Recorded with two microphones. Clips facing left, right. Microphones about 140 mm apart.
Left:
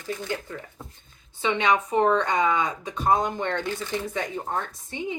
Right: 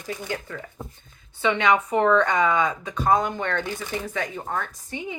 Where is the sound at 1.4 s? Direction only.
20° left (ahead or behind).